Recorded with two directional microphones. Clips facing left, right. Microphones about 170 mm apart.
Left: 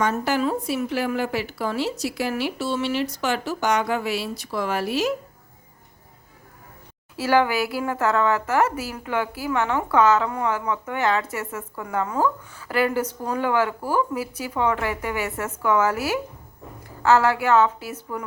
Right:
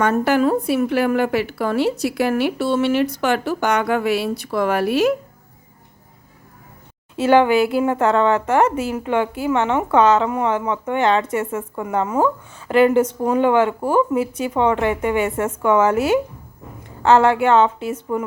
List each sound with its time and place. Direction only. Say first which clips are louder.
0.0 s a woman's voice: right 6 dB; 55° right (ahead or behind)
7.2 s speech: right 6 dB; 25° right (ahead or behind)